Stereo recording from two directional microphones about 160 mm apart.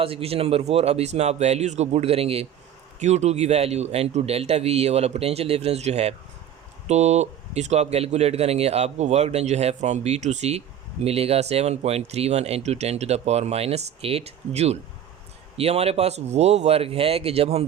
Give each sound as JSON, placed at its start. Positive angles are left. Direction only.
{"t": 0.0, "sound": "speech", "side_deg": -35}